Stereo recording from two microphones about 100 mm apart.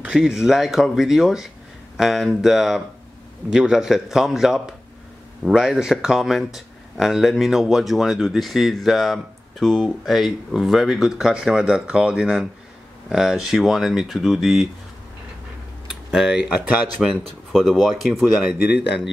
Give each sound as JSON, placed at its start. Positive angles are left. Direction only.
{"t": 0.0, "sound": "speech", "side_deg": -5}
{"t": 15.9, "sound": "tick-tock", "side_deg": -5}
{"t": 17.0, "sound": "speech", "side_deg": 0}
{"t": 18.4, "sound": "speech", "side_deg": -10}